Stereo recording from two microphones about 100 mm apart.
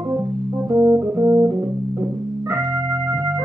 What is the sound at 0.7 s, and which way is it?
Organ, 25° right (ahead or behind).